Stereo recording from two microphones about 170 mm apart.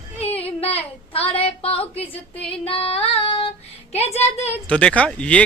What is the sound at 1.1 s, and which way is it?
A woman's voice, 35° left (ahead or behind).